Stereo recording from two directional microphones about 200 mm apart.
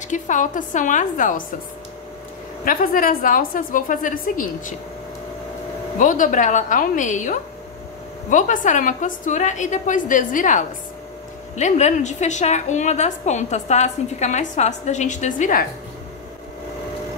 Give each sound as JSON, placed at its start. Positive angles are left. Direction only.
{"t": 0.1, "sound": "a woman's voice", "side_deg": 40}
{"t": 2.6, "sound": "a woman's voice", "side_deg": 45}
{"t": 5.9, "sound": "a woman's voice", "side_deg": 40}